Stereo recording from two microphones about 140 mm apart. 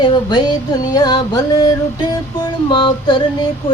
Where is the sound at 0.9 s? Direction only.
30° left (ahead or behind).